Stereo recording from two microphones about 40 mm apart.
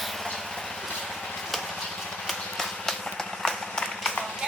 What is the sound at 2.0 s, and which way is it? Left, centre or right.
Horse, centre.